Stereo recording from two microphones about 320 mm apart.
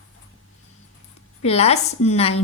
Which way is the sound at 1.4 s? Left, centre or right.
Centre.